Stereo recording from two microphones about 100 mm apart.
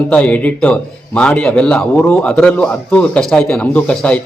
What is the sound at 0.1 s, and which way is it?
A man's voice, 15° left (ahead or behind).